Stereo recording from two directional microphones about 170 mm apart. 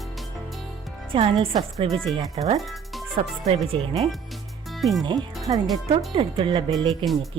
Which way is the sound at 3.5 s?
35° right (ahead or behind).